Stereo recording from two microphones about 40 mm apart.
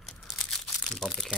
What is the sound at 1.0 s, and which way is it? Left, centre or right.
Speech, centre.